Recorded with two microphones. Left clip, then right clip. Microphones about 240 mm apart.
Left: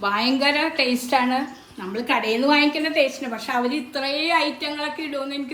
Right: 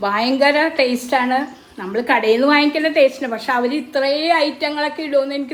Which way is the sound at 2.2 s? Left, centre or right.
Right.